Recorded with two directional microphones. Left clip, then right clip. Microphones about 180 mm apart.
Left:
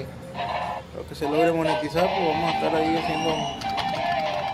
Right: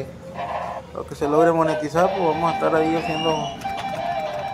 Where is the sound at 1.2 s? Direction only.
Centre (ahead or behind).